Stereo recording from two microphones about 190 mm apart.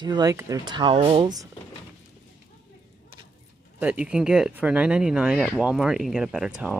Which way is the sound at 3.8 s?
5° right (ahead or behind).